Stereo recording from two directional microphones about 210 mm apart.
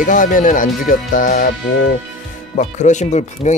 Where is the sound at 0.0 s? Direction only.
40° left (ahead or behind).